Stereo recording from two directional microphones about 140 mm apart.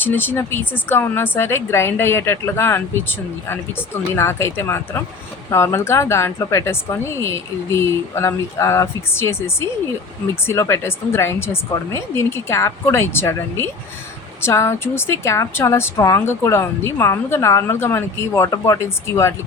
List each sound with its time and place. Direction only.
0.0 s a woman's voice: 15° left (ahead or behind)